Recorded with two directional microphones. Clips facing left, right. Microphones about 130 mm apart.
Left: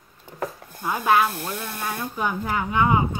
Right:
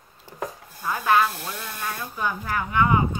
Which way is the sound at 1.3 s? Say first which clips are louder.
Left 4 dB; 55° left (ahead or behind).